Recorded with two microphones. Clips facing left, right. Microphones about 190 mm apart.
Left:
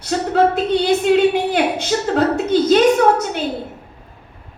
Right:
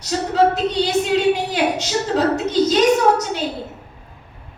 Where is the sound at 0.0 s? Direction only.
55° left (ahead or behind).